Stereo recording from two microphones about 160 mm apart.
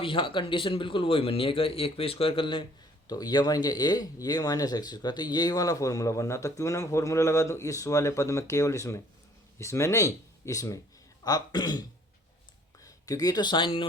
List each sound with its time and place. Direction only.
0.0 s speech: 35° left (ahead or behind)